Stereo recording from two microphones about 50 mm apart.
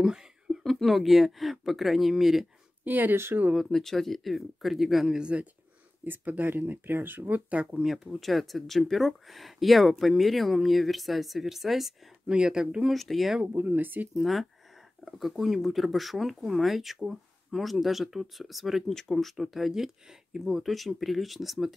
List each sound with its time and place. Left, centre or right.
0.0 s a sound: centre
0.7 s speech: centre
2.8 s speech: right
3.7 s speech: centre
5.2 s speech: right
6.0 s speech: right
7.8 s speech: centre
12.3 s speech: centre
12.9 s speech: centre
13.5 s speech: right
14.1 s speech: centre